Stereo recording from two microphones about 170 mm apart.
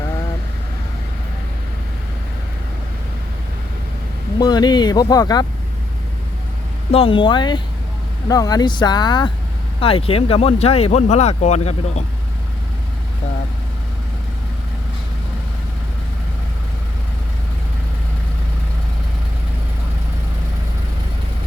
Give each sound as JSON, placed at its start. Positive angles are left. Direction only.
{"t": 4.4, "sound": "speech", "side_deg": 25}
{"t": 6.9, "sound": "speech", "side_deg": 30}